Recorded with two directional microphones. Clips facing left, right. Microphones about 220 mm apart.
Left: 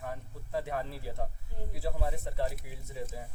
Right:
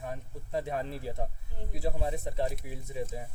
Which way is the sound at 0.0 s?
20° right (ahead or behind).